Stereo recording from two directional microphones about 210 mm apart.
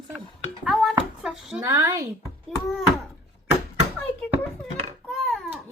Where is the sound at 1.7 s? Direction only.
15° right (ahead or behind).